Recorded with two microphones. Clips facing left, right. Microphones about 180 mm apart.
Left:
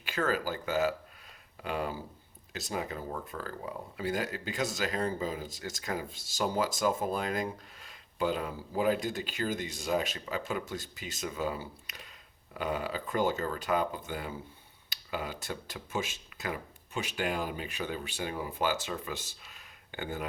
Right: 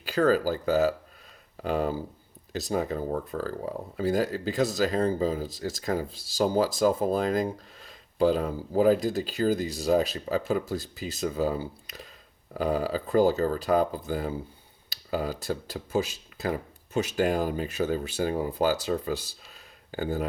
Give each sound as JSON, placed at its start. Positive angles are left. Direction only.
{"t": 0.0, "sound": "speech", "side_deg": -35}